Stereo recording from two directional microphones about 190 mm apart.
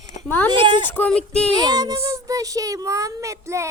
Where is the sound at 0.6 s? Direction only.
25° right (ahead or behind).